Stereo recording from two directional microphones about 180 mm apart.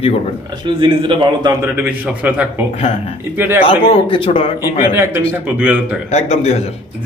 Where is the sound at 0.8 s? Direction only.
30° right (ahead or behind).